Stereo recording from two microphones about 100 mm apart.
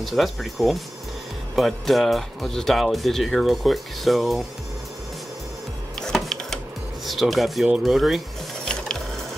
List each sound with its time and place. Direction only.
0.0 s speech: centre (ahead or behind)
5.9 s printer: 5° left (ahead or behind)
7.1 s speech: centre (ahead or behind)